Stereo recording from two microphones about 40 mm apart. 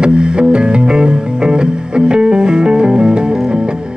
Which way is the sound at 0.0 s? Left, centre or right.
Right.